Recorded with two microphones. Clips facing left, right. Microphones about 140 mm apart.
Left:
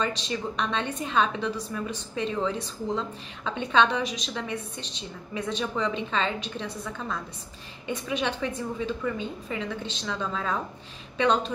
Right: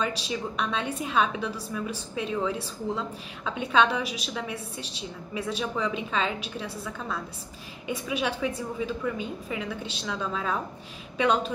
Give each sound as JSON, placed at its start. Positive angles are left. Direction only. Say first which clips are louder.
{"t": 0.0, "sound": "a woman's voice", "louder": "left 1 dB", "side_deg": -5}